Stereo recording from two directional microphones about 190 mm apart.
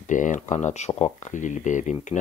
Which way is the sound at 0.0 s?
40° left (ahead or behind).